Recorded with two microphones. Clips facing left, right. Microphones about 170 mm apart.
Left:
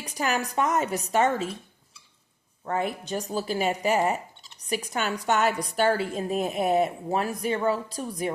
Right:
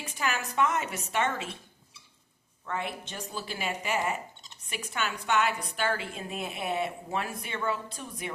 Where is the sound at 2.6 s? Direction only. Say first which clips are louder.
Left 6 dB; 40° left (ahead or behind).